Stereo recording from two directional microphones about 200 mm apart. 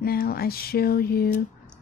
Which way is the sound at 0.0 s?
50° left (ahead or behind).